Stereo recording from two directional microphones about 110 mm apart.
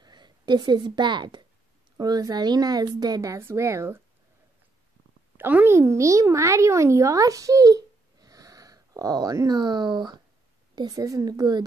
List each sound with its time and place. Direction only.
0.0 s a woman's voice: 40° right (ahead or behind); by 4.0 s 25° right (ahead or behind)
5.4 s a woman's voice: 20° right (ahead or behind); by 11.6 s 40° right (ahead or behind)